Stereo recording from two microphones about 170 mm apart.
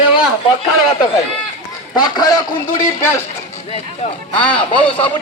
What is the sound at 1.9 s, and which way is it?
Speech, 25° left (ahead or behind).